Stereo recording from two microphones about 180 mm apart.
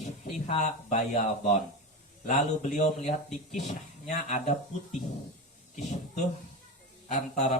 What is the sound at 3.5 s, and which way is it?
Speech, 40° left (ahead or behind).